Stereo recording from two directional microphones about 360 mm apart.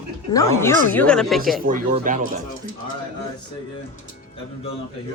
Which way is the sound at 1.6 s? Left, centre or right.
Right.